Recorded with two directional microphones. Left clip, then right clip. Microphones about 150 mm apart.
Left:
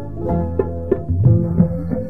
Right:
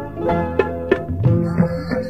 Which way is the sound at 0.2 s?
25° right (ahead or behind).